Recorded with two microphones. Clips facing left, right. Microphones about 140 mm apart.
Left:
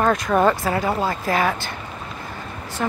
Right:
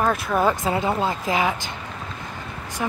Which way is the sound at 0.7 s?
20° right (ahead or behind).